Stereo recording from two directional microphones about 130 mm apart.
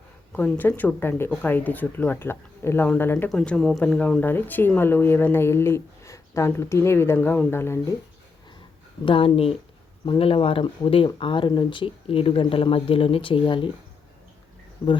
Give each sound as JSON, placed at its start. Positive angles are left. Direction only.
{"t": 0.3, "sound": "speech", "side_deg": 15}
{"t": 9.0, "sound": "speech", "side_deg": 45}